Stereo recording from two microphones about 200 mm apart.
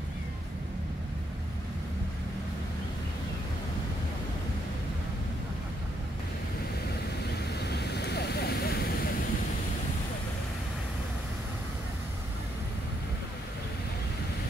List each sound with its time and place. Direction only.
7.6 s vehicle: 55° left (ahead or behind)